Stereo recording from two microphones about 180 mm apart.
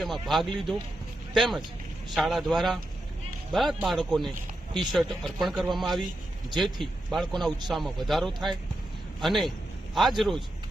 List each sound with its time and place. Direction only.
0.0 s speech: centre (ahead or behind)
4.7 s speech: 25° right (ahead or behind)
4.9 s speech: centre (ahead or behind)